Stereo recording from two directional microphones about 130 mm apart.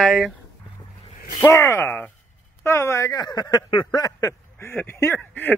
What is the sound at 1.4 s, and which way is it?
Speech, 20° left (ahead or behind).